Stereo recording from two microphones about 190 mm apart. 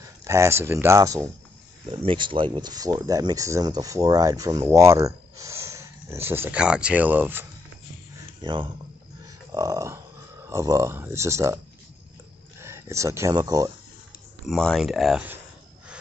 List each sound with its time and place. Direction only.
0.2 s speech: 15° right (ahead or behind)
8.4 s speech: 25° right (ahead or behind)
14.4 s speech: centre (ahead or behind)